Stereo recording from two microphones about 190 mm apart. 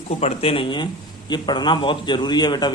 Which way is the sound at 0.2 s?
30° left (ahead or behind).